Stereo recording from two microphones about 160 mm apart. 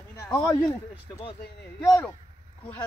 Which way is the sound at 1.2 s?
35° left (ahead or behind).